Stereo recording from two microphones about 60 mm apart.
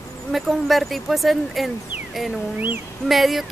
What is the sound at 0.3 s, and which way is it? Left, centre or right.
Speech, centre.